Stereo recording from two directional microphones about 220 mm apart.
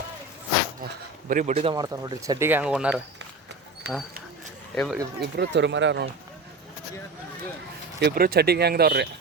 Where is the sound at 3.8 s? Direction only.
50° right (ahead or behind).